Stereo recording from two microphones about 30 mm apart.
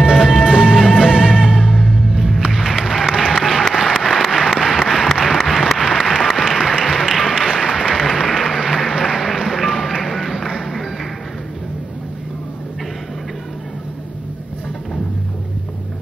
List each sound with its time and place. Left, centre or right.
0.1 s music: centre
0.4 s music: right
0.7 s music: centre
2.5 s applause: centre
3.1 s applause: centre
9.5 s music: centre